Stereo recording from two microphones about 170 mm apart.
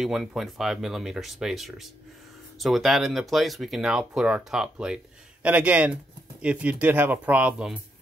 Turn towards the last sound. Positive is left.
turn(degrees=-10)  # may be behind; listen again after turning